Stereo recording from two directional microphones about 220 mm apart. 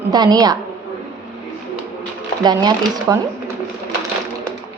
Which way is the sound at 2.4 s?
15° right (ahead or behind).